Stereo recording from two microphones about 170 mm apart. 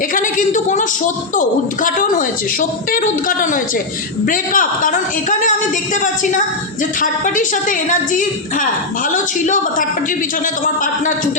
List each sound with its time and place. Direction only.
0.1 s a woman's voice: 50° left (ahead or behind)